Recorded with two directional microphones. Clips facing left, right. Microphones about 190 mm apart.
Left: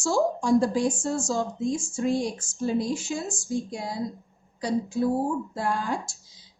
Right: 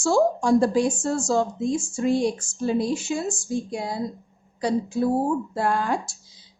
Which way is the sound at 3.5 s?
65° right (ahead or behind).